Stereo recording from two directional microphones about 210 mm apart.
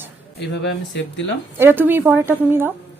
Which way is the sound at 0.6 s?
55° left (ahead or behind).